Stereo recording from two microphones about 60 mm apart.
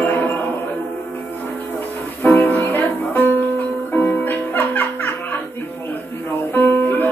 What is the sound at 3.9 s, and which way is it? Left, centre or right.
Music, left.